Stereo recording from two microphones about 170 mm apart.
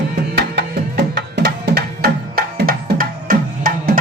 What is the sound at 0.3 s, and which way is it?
Music, 70° right (ahead or behind).